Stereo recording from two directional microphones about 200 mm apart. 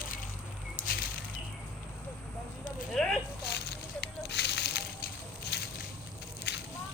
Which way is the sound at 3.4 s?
55° left (ahead or behind).